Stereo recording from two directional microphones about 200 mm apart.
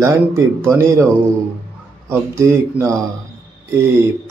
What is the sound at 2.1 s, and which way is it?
Speech, 10° right (ahead or behind).